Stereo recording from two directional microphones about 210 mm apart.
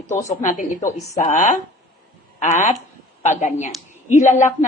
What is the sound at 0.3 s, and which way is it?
Speech, 35° left (ahead or behind).